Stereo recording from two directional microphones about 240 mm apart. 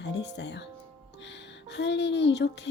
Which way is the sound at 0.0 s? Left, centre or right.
Left.